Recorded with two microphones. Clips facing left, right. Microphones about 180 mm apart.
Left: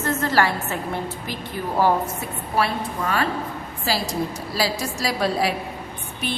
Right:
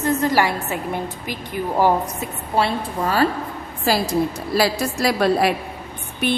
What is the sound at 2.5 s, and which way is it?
Speech, 30° right (ahead or behind).